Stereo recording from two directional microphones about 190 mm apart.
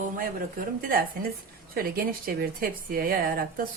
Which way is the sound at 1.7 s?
50° right (ahead or behind).